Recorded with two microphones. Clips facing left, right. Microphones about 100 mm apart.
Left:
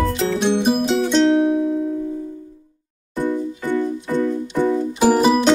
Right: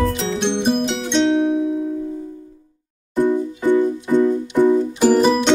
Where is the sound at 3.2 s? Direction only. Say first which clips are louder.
Right 4 dB; 20° right (ahead or behind).